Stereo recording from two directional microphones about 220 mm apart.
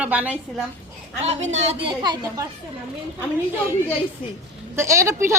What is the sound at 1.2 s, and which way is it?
A woman's voice, 30° right (ahead or behind).